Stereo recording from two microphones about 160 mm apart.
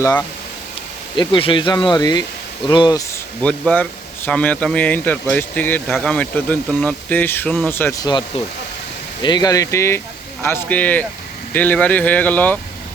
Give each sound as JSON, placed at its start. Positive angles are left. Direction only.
{"t": 0.0, "sound": "speech", "side_deg": 20}
{"t": 1.1, "sound": "speech", "side_deg": 30}
{"t": 3.4, "sound": "speech", "side_deg": 10}
{"t": 9.2, "sound": "speech", "side_deg": 25}